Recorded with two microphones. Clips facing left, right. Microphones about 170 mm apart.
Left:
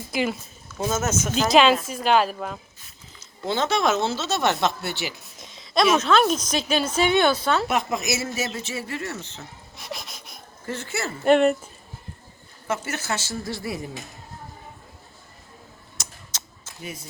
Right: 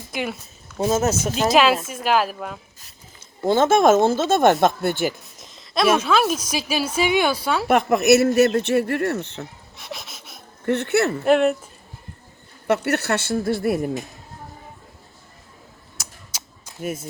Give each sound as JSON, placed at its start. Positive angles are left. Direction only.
{"t": 0.1, "sound": "a woman's voice", "side_deg": 0}
{"t": 0.8, "sound": "speech", "side_deg": -35}
{"t": 1.4, "sound": "a woman's voice", "side_deg": 0}
{"t": 3.4, "sound": "speech", "side_deg": -45}
{"t": 5.4, "sound": "a woman's voice", "side_deg": 0}
{"t": 7.7, "sound": "speech", "side_deg": -60}
{"t": 9.7, "sound": "a sound", "side_deg": 0}
{"t": 10.7, "sound": "speech", "side_deg": -65}
{"t": 11.2, "sound": "a woman's voice", "side_deg": 0}
{"t": 12.6, "sound": "speech", "side_deg": -65}
{"t": 16.0, "sound": "a sound", "side_deg": -10}
{"t": 16.8, "sound": "speech", "side_deg": -50}